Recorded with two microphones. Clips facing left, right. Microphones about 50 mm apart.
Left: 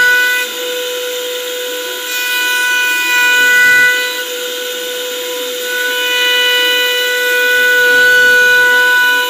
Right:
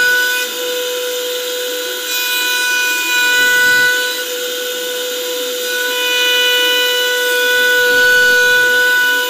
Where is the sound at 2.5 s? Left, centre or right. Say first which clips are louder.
Left 3 dB; left.